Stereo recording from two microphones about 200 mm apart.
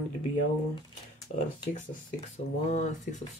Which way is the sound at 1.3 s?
40° left (ahead or behind).